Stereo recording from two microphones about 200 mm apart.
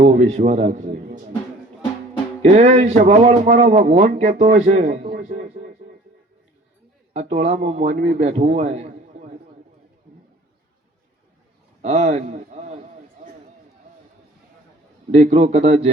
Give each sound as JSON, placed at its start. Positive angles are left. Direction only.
{"t": 0.0, "sound": "a man's voice", "side_deg": -35}
{"t": 2.4, "sound": "a man's voice", "side_deg": -35}
{"t": 7.1, "sound": "a man's voice", "side_deg": -30}
{"t": 11.8, "sound": "a man's voice", "side_deg": -35}
{"t": 15.1, "sound": "a man's voice", "side_deg": -30}